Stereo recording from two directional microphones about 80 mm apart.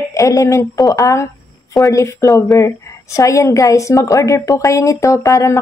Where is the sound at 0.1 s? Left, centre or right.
Left.